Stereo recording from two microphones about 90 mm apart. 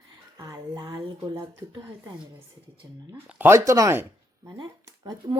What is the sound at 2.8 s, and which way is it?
Speech, 30° right (ahead or behind).